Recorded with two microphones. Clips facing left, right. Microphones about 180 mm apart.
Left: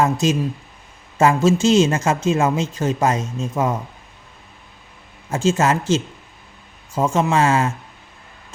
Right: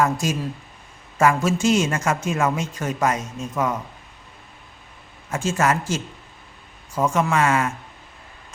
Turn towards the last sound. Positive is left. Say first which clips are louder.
# left 3 dB
turn(degrees=25)  # may be behind; listen again after turning